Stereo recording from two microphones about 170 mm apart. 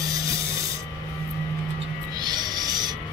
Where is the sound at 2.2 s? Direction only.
25° right (ahead or behind).